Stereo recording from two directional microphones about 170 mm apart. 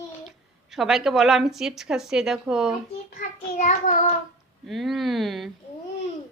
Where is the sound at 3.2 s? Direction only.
50° left (ahead or behind).